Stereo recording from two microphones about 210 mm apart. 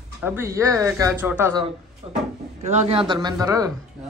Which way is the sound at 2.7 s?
30° right (ahead or behind).